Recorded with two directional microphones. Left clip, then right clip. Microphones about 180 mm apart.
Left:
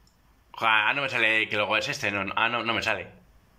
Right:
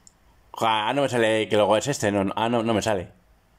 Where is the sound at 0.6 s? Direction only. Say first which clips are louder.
Right 1 dB; 30° right (ahead or behind).